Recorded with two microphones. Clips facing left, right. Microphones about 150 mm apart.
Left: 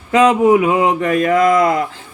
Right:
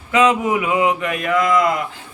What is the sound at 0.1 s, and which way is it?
Speech, 40° left (ahead or behind).